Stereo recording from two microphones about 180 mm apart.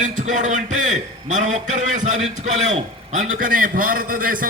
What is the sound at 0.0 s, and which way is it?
A man's voice, 45° right (ahead or behind).